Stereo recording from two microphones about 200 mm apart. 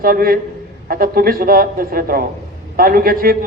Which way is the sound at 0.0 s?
45° right (ahead or behind).